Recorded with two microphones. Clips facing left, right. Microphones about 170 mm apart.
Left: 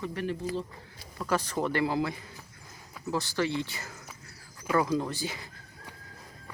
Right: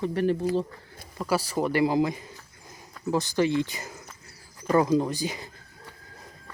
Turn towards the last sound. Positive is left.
turn(degrees=-15)  # may be behind; listen again after turning